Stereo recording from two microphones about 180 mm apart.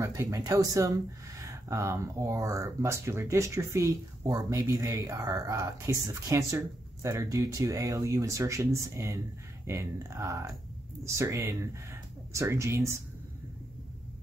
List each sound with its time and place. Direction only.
0.0 s speech: 15° right (ahead or behind)